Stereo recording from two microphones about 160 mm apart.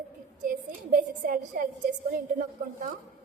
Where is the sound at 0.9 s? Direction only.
60° right (ahead or behind).